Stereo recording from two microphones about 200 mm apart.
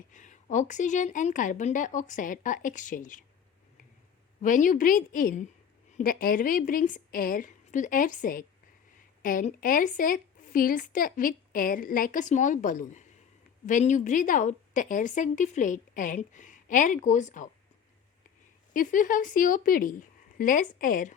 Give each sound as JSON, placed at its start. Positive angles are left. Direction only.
{"t": 0.1, "sound": "a woman's voice", "side_deg": 40}
{"t": 4.4, "sound": "a woman's voice", "side_deg": 40}
{"t": 18.7, "sound": "a woman's voice", "side_deg": 40}